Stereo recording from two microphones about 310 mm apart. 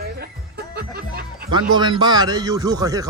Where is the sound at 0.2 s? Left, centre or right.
Right.